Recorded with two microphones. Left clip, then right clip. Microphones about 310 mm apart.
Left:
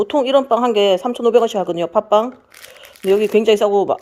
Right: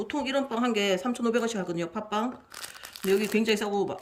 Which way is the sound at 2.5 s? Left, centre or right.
Centre.